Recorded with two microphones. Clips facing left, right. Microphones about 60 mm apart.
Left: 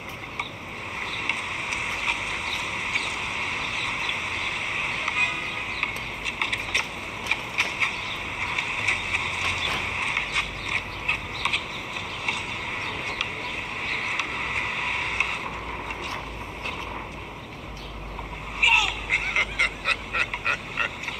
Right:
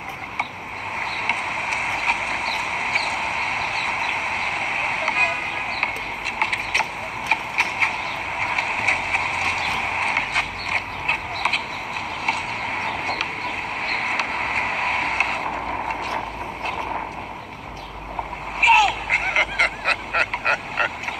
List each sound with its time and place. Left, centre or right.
0.9 s horse: right
8.4 s clip-clop: right
12.3 s a sound: right
13.8 s vehicle: right
18.6 s vehicle: right
19.9 s fowl: right